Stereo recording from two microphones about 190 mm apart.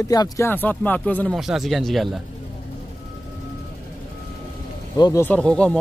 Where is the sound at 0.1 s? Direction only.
15° left (ahead or behind); by 2.2 s centre (ahead or behind).